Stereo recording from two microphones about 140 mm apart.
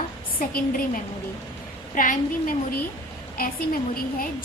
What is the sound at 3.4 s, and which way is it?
Speech, 90° left.